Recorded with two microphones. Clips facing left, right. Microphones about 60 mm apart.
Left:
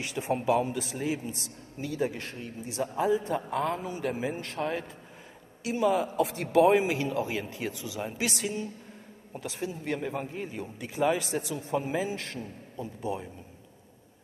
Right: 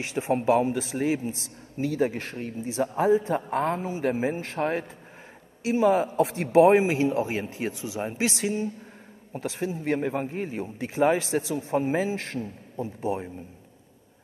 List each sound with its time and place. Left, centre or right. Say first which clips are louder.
0.0 s a man's voice: right 4 dB; right